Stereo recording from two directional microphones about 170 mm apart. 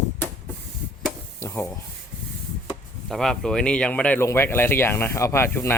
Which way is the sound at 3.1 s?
Centre (ahead or behind).